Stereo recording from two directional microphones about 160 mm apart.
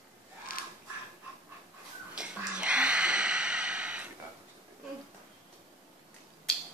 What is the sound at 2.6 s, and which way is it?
Snort, 5° right (ahead or behind).